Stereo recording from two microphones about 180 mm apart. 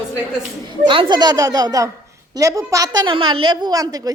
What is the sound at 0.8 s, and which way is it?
A woman's voice, 30° right (ahead or behind).